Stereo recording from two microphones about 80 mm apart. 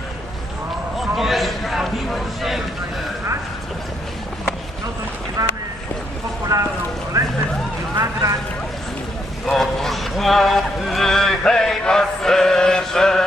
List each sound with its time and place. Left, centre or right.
1.1 s a sound: centre
5.4 s boat: right
6.5 s speech: right
7.1 s music: right
8.0 s boat: right
9.5 s a sound: centre